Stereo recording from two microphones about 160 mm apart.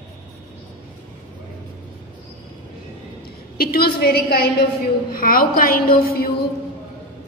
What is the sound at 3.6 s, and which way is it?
Speech, 70° left (ahead or behind).